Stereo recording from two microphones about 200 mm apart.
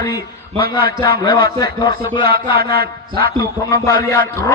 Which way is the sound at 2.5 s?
50° right (ahead or behind).